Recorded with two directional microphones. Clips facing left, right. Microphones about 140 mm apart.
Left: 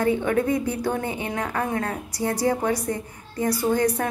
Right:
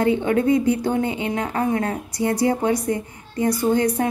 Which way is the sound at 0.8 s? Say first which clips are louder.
Right 4 dB; 25° right (ahead or behind).